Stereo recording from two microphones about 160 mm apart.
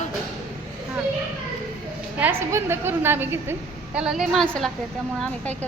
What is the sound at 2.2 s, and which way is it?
A woman's voice, 15° right (ahead or behind).